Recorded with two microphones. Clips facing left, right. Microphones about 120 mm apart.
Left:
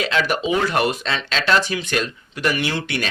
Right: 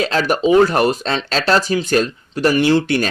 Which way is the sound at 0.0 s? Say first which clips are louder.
Right 5 dB; 40° right (ahead or behind).